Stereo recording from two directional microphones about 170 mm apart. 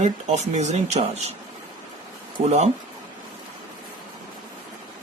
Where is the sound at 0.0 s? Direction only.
40° right (ahead or behind).